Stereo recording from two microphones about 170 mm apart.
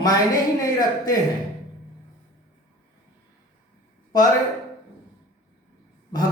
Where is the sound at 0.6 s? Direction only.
20° left (ahead or behind).